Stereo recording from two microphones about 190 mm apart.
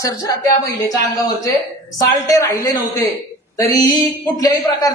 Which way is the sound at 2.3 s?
15° left (ahead or behind).